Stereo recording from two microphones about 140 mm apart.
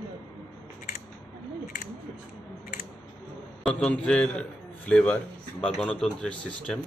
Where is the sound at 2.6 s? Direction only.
90° left.